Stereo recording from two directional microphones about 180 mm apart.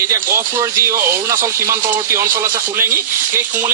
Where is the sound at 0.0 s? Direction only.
15° right (ahead or behind).